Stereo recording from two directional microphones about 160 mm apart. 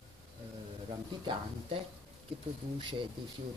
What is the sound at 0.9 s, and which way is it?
Speech, 30° right (ahead or behind).